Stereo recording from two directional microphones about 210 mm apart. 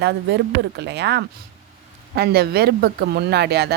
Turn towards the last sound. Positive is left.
turn(degrees=-50)  # may be behind; listen again after turning